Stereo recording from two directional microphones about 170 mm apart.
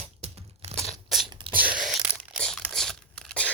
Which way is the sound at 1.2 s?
30° right (ahead or behind).